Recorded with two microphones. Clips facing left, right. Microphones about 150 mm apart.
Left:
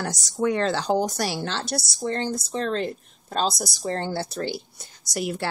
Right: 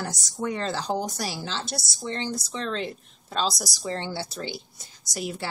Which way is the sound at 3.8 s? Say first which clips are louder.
Left 4 dB; 45° left (ahead or behind).